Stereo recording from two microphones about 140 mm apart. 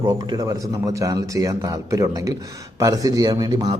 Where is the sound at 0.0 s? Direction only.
30° right (ahead or behind).